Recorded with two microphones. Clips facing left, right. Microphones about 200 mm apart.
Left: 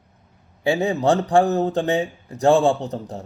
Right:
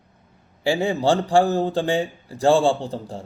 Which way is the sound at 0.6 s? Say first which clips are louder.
Left 1 dB; 30° right (ahead or behind).